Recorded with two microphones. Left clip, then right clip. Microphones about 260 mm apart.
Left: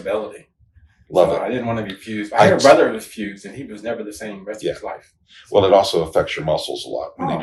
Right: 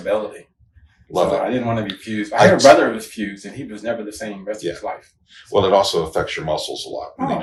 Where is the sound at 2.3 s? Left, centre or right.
Left.